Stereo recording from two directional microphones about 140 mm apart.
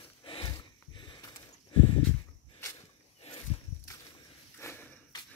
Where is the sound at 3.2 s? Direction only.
50° left (ahead or behind).